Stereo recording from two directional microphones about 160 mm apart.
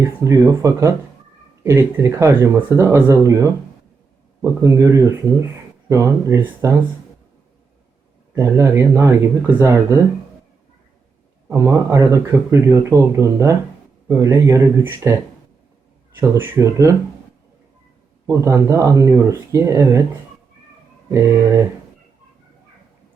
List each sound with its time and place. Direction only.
0.3 s speech: 20° right (ahead or behind)
4.8 s speech: 20° right (ahead or behind)
8.4 s speech: 15° right (ahead or behind)
11.4 s speech: 15° right (ahead or behind)
16.2 s speech: 20° right (ahead or behind)
18.3 s speech: 20° right (ahead or behind)
21.1 s speech: 15° right (ahead or behind)